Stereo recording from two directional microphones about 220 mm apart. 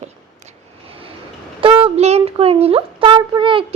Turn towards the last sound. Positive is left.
turn(degrees=-20)  # may be behind; listen again after turning